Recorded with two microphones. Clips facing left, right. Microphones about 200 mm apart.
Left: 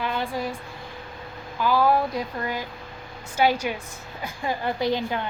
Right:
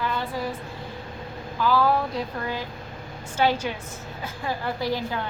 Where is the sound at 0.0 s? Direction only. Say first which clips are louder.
Left 1 dB; 15° left (ahead or behind).